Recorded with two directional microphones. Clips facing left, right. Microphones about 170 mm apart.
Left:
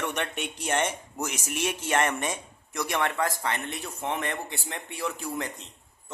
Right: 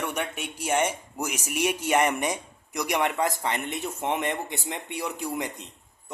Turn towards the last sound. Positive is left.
turn(degrees=-15)  # may be behind; listen again after turning